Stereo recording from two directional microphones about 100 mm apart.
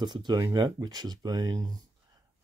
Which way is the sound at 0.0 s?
45° right (ahead or behind).